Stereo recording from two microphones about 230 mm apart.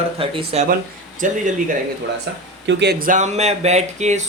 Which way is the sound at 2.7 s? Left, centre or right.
Right.